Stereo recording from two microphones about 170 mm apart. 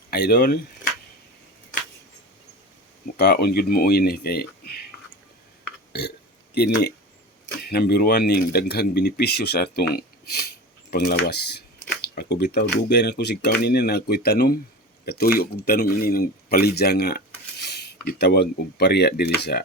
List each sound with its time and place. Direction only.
0.1 s speech: 65° left (ahead or behind)
3.2 s speech: 70° left (ahead or behind)
5.6 s burping: 75° left (ahead or behind)
7.6 s speech: 70° left (ahead or behind)
17.7 s a sound: 70° left (ahead or behind)
18.0 s speech: 65° left (ahead or behind)